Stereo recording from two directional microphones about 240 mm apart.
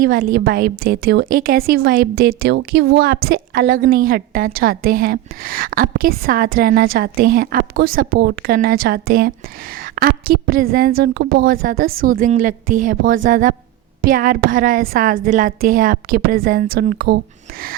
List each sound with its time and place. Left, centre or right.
0.0 s a woman's voice: right